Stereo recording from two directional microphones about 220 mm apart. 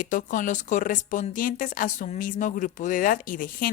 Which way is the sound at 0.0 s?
35° left (ahead or behind).